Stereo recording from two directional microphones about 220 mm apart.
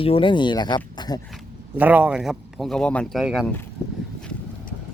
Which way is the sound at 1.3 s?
5° right (ahead or behind).